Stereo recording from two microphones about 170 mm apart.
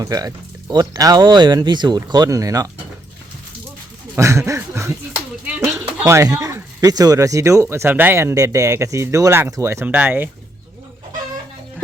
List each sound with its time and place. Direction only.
0.0 s speech: 20° right (ahead or behind)
4.2 s speech: 15° right (ahead or behind)